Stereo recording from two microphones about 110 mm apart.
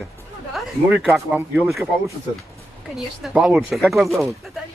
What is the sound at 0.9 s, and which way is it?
Speech, 10° right (ahead or behind).